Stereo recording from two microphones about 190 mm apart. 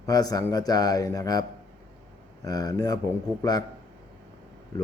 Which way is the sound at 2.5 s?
20° left (ahead or behind).